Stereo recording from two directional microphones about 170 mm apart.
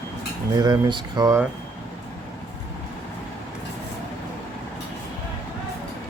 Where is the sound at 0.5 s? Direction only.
25° right (ahead or behind).